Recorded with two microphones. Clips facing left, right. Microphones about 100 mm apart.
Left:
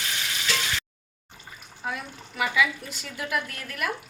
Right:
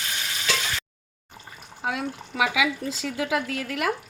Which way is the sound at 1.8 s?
90° right.